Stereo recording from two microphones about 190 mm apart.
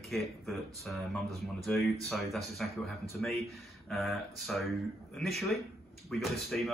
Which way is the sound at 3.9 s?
Centre (ahead or behind).